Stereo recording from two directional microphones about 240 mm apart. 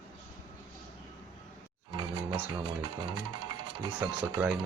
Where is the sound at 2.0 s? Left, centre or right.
Centre.